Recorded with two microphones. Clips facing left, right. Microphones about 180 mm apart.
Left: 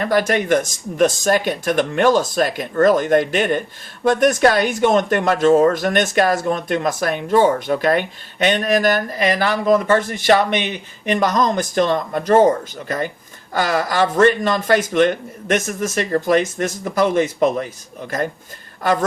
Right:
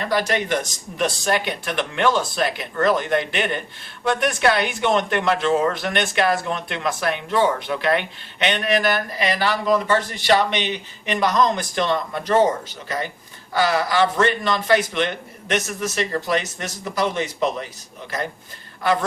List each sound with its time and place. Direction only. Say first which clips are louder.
0.0 s speech: left 4 dB; 50° left (ahead or behind)